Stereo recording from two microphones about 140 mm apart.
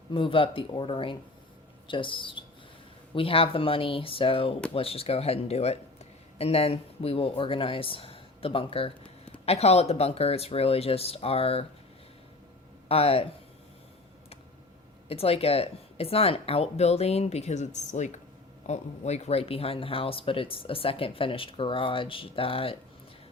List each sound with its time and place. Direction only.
0.1 s speech: 40° left (ahead or behind)
12.9 s speech: 45° left (ahead or behind)
15.1 s speech: 45° left (ahead or behind)